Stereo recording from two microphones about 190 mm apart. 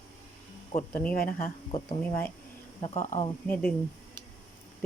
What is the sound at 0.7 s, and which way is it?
Speech, 35° left (ahead or behind).